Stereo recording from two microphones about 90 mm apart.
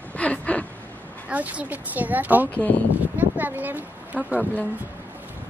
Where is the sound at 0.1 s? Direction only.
15° left (ahead or behind).